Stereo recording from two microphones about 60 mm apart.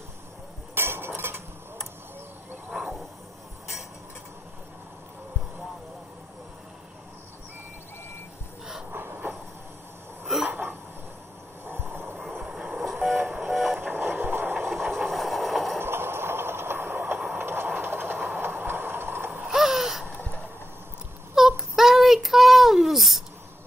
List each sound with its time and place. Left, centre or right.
0.7 s dishes: right
2.7 s a sound: centre
8.9 s train: right
10.2 s cough: centre
11.6 s train: right
12.8 s train: centre
14.1 s vehicle: right
14.7 s train: centre
15.8 s train: right
19.5 s a sound: centre
20.1 s a sound: left
21.4 s child singing: centre